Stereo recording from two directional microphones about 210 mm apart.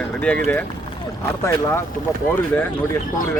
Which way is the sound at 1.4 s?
15° left (ahead or behind).